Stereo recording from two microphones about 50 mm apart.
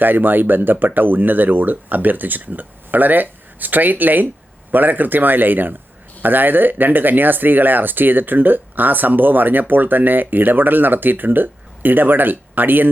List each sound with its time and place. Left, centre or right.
0.0 s speech: right